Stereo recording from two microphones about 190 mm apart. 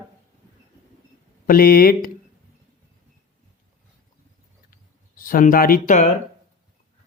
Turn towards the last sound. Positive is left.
turn(degrees=40)  # may be behind; listen again after turning